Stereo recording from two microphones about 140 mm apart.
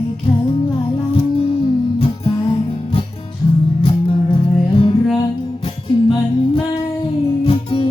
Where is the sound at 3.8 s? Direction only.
40° left (ahead or behind).